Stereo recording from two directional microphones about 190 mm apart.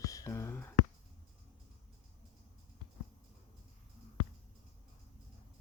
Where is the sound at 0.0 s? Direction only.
15° left (ahead or behind).